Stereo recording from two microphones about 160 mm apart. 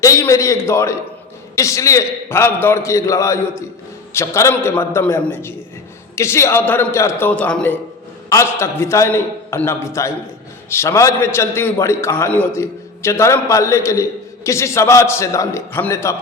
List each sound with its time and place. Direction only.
0.0 s a man's voice: 20° left (ahead or behind)
8.3 s a man's voice: 20° left (ahead or behind)